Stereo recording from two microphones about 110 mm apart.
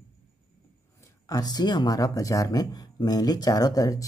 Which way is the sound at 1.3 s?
35° left (ahead or behind).